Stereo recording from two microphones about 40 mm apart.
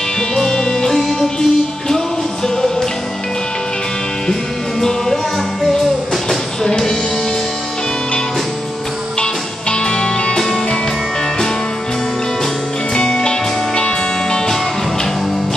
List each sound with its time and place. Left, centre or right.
0.4 s music: centre
4.3 s music: centre
9.2 s music: left
12.9 s music: centre